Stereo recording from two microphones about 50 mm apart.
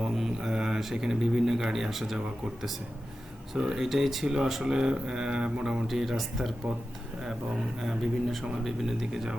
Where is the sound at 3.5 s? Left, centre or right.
Centre.